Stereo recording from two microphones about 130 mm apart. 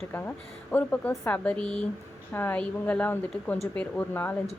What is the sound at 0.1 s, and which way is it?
Speech, 15° left (ahead or behind).